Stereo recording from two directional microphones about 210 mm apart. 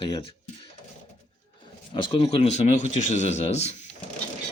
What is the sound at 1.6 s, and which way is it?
Speech, 20° left (ahead or behind).